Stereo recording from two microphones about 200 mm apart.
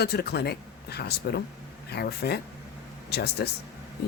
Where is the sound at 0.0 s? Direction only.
55° left (ahead or behind).